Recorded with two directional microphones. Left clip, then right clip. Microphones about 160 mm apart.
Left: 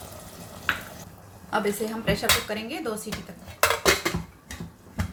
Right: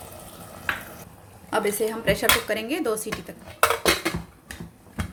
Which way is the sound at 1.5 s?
40° right (ahead or behind).